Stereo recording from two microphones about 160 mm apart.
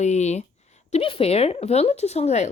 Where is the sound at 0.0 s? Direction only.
45° left (ahead or behind).